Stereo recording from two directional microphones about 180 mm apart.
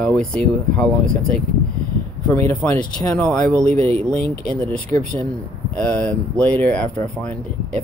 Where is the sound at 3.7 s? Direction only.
35° right (ahead or behind).